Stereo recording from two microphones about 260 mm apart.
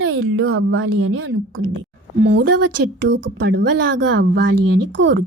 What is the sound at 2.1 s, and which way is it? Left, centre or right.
Speech, right.